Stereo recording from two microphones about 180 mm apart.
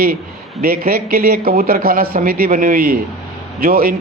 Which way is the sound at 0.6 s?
55° right (ahead or behind).